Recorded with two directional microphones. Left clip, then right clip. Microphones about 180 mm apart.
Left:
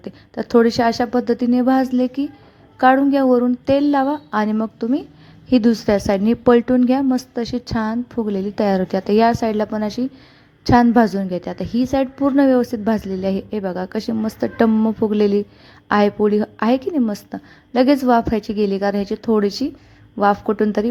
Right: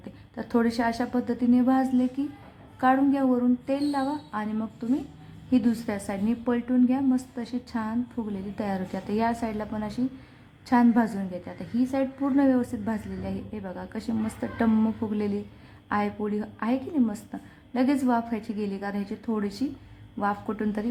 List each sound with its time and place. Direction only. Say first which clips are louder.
0.0 s a woman's voice: left 11 dB; 35° left (ahead or behind)